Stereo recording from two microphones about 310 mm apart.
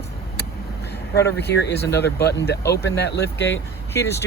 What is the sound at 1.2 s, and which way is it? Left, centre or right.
Speech, left.